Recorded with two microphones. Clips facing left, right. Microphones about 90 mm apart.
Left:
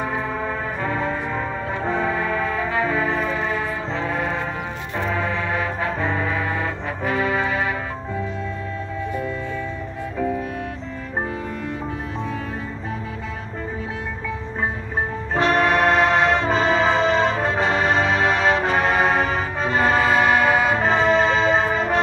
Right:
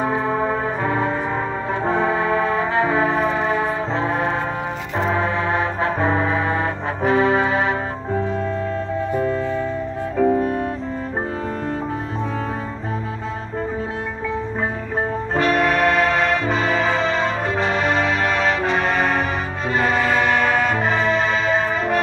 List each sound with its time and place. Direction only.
0.0 s music: 20° right (ahead or behind)
3.9 s foghorn: 25° right (ahead or behind)
4.9 s music: 25° right (ahead or behind)
9.1 s music: 40° right (ahead or behind)
15.3 s music: 25° left (ahead or behind)
15.6 s music: 10° left (ahead or behind)
16.3 s music: 25° left (ahead or behind)
18.8 s music: 10° left (ahead or behind)
20.9 s music: 30° left (ahead or behind)